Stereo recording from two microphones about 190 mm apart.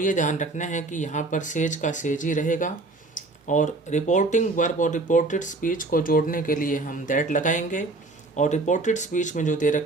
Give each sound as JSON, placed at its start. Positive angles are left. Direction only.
{"t": 0.0, "sound": "speech", "side_deg": 40}